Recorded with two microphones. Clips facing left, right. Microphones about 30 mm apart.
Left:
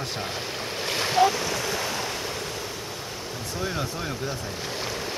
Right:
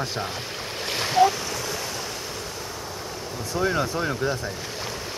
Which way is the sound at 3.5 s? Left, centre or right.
Centre.